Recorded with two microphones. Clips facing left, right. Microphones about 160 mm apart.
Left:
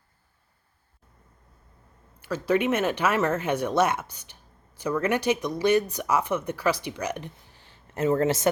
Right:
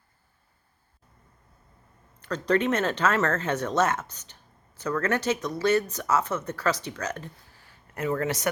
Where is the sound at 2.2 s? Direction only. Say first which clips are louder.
Even; 10° left (ahead or behind).